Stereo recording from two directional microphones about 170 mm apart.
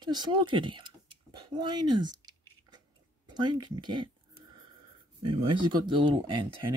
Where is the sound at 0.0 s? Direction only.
25° right (ahead or behind).